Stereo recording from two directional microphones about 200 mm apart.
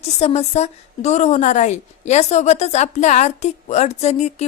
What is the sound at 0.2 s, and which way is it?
A woman's voice, 30° left (ahead or behind).